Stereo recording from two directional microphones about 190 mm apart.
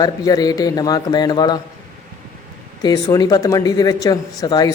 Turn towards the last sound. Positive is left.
turn(degrees=20)  # may be behind; listen again after turning